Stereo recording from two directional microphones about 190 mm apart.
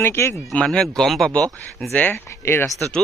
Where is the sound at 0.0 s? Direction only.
15° left (ahead or behind).